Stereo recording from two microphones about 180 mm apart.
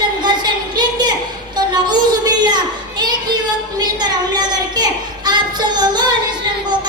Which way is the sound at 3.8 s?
25° right (ahead or behind).